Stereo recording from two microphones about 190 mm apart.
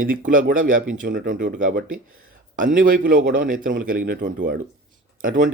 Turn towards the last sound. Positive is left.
turn(degrees=-45)  # may be behind; listen again after turning